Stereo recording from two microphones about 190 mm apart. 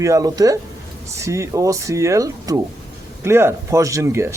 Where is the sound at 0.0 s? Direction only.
15° right (ahead or behind).